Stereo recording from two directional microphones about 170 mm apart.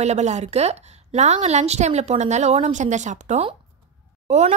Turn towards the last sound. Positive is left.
turn(degrees=-40)  # may be behind; listen again after turning